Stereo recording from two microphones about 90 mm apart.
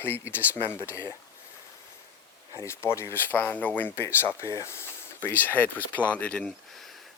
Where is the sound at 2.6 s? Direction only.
30° left (ahead or behind).